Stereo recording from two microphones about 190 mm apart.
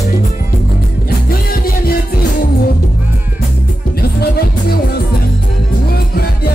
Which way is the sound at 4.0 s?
55° left (ahead or behind).